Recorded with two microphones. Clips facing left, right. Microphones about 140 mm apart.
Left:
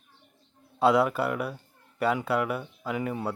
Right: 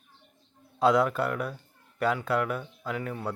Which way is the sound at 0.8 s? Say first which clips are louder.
Left 1 dB; 5° left (ahead or behind).